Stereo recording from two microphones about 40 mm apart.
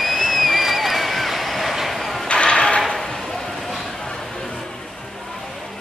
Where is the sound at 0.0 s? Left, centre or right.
Centre.